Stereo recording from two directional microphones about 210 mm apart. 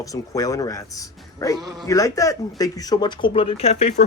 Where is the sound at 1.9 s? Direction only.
15° left (ahead or behind).